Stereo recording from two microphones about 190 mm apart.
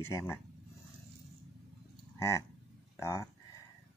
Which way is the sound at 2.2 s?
15° left (ahead or behind).